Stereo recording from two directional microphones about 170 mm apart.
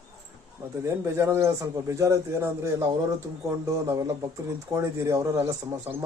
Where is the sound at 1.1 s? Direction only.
15° right (ahead or behind).